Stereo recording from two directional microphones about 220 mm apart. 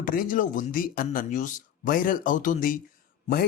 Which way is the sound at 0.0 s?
40° left (ahead or behind).